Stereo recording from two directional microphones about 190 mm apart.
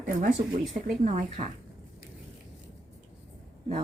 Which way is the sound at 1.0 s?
40° right (ahead or behind).